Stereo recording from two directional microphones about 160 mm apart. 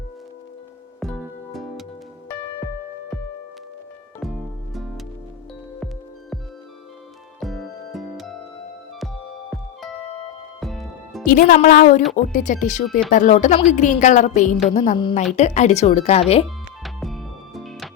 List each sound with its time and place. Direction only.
0.9 s music: 5° left (ahead or behind)
7.3 s music: centre (ahead or behind)
10.6 s music: centre (ahead or behind)
11.3 s a woman's voice: 60° left (ahead or behind); by 16.5 s 40° left (ahead or behind)
16.8 s music: centre (ahead or behind)